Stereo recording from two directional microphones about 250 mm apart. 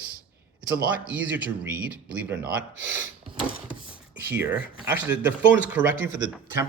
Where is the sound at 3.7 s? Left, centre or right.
Centre.